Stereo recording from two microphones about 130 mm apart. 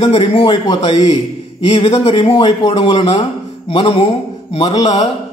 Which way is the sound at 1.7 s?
50° left (ahead or behind).